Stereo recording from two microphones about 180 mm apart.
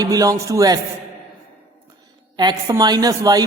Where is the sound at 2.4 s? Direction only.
20° right (ahead or behind).